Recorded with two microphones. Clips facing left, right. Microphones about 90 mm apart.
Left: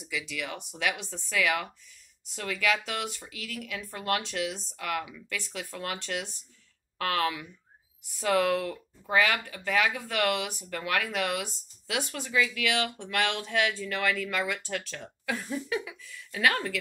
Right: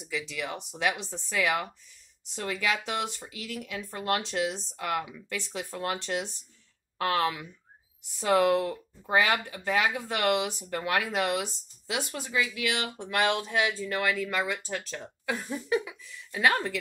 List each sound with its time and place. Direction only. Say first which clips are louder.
0.0 s speech: right 1 dB; 25° right (ahead or behind)
12.3 s speech: left 2 dB; 30° right (ahead or behind)
13.1 s speech: right 3 dB; 15° right (ahead or behind)